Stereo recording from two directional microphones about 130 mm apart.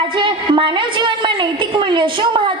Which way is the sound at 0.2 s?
40° right (ahead or behind).